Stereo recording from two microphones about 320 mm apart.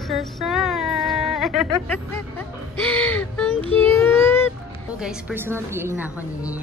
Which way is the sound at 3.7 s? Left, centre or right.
Centre.